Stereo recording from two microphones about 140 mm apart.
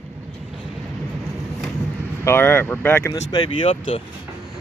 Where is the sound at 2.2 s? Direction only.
15° left (ahead or behind).